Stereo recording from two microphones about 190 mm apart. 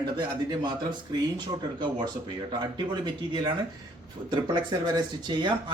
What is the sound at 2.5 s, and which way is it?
Speech, 20° right (ahead or behind).